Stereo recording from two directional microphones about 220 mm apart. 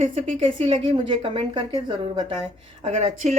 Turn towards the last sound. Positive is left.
turn(degrees=-30)  # may be behind; listen again after turning